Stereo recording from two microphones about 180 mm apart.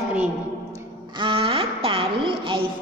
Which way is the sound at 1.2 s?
30° right (ahead or behind).